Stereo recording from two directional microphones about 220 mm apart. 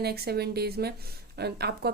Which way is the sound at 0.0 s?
45° right (ahead or behind).